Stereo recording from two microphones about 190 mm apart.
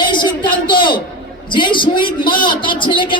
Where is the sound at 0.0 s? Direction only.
25° left (ahead or behind).